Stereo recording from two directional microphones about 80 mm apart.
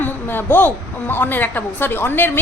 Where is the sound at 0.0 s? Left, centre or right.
Left.